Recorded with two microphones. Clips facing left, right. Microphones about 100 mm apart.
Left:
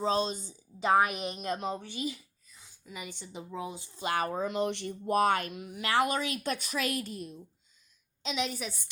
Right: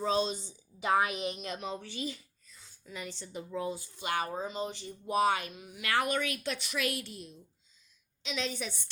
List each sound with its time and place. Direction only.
0.0 s a woman's voice: 40° left (ahead or behind)
1.8 s speech: 15° left (ahead or behind)
3.9 s a woman's voice: 35° left (ahead or behind)
4.3 s speech: 60° left (ahead or behind)
5.8 s speech: 30° left (ahead or behind)
6.4 s a woman's voice: 40° left (ahead or behind)
8.4 s a woman's voice: 5° left (ahead or behind)